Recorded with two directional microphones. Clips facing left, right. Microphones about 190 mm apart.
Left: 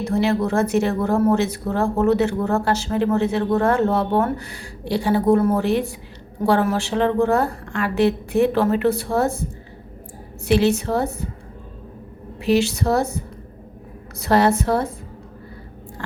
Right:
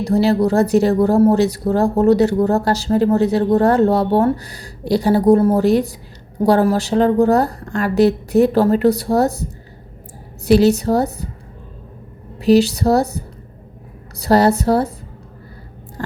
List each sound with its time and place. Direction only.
0.0 s speech: 35° right (ahead or behind)
12.4 s speech: 35° right (ahead or behind)
16.0 s a sound: 40° right (ahead or behind)